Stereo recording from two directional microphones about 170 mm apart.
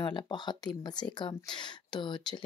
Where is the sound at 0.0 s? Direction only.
25° left (ahead or behind).